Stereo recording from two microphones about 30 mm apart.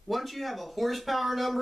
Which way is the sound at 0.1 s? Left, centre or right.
Centre.